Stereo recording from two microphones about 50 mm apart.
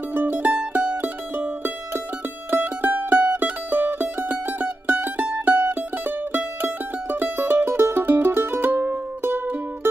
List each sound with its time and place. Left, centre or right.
0.1 s mandolin: right
7.9 s music: right